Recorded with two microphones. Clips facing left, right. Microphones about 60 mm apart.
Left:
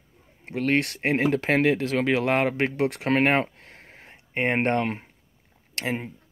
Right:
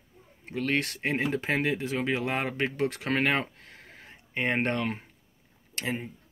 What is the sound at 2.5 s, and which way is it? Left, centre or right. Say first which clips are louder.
Speech: left 4 dB; left.